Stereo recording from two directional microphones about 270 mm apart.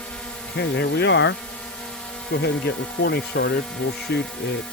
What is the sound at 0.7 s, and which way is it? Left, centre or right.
Speech, left.